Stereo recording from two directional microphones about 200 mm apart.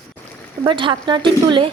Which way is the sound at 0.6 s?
25° right (ahead or behind).